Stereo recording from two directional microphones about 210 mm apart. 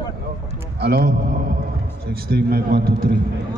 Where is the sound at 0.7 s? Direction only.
50° right (ahead or behind).